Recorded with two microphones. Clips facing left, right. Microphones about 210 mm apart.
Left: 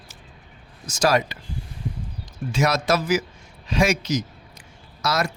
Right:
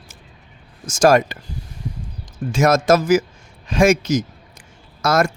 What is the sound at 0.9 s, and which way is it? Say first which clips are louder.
Speech: right 7 dB; 50° right (ahead or behind).